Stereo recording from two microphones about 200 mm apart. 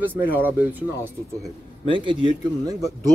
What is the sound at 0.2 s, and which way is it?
Speech, 10° right (ahead or behind).